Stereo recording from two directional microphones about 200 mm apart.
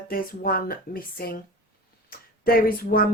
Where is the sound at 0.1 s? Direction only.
45° left (ahead or behind).